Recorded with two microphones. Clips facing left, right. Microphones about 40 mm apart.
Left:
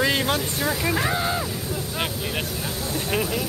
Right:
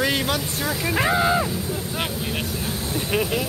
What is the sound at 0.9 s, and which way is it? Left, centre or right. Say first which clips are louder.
Speech: right 4 dB; right.